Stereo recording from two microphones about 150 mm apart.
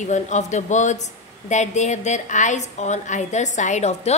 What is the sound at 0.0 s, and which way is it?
Speech, 55° left (ahead or behind).